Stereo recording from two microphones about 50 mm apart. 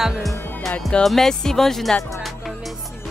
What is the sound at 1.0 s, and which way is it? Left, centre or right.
Speech, centre.